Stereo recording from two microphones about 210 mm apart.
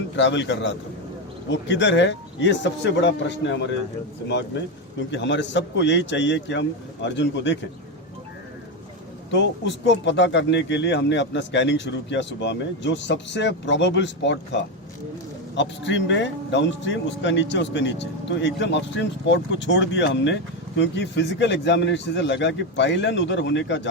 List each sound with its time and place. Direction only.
0.2 s speech: 60° left (ahead or behind)
9.3 s speech: 55° left (ahead or behind)
15.5 s speech: 60° left (ahead or behind)